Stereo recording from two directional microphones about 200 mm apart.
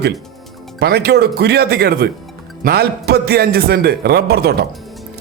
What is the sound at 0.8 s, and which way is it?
A man's voice, 55° right (ahead or behind).